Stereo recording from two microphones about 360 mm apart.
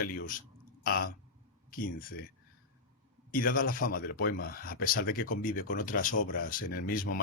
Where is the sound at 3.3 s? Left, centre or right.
Left.